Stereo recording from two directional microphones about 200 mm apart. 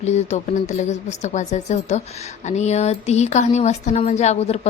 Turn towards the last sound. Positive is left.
turn(degrees=35)  # may be behind; listen again after turning